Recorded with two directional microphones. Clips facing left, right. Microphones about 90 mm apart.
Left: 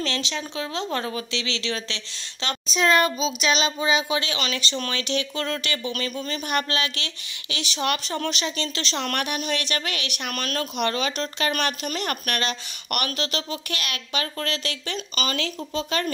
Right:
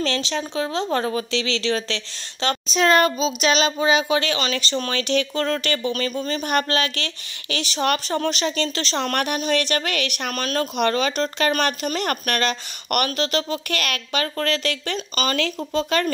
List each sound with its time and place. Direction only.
0.0 s speech: 40° right (ahead or behind)
2.4 s speech: 50° right (ahead or behind)